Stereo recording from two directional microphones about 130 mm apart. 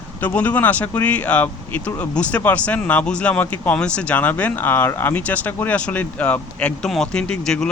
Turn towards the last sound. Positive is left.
turn(degrees=5)  # may be behind; listen again after turning